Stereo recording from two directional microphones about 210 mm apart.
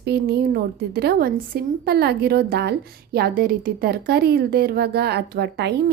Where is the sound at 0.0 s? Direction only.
50° right (ahead or behind).